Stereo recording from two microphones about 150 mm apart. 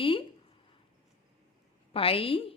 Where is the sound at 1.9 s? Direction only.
40° left (ahead or behind).